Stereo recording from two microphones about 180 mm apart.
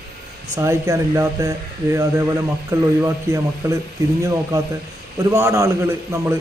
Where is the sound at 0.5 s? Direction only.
15° right (ahead or behind).